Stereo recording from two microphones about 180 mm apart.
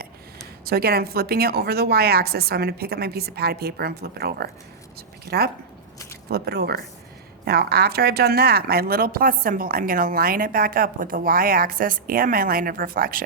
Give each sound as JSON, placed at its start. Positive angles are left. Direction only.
{"t": 0.6, "sound": "a woman's voice", "side_deg": -60}